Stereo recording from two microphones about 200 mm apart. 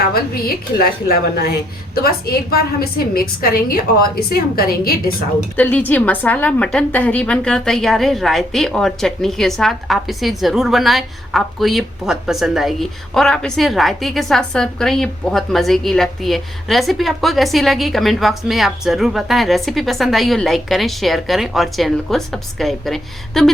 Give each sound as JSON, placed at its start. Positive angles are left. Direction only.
{"t": 0.0, "sound": "a woman's voice", "side_deg": 50}
{"t": 5.5, "sound": "a woman's voice", "side_deg": 10}